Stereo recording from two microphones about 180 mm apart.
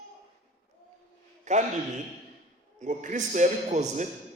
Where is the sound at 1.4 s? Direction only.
40° right (ahead or behind).